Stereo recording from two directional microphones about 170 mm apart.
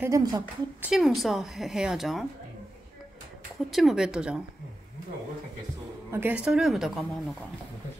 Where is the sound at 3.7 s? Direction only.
Centre (ahead or behind).